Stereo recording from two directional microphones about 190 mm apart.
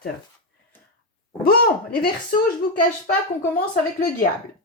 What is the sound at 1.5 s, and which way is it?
Speech, 50° left (ahead or behind).